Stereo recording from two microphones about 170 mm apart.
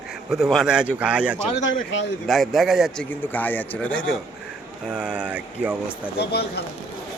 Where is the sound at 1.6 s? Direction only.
90° left.